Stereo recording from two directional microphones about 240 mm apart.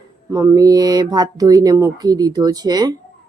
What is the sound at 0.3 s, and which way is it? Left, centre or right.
Speech, centre.